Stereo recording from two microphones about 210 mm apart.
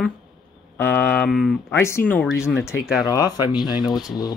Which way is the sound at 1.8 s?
10° left (ahead or behind).